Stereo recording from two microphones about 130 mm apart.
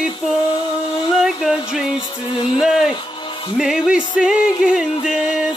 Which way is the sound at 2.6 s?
5° right (ahead or behind).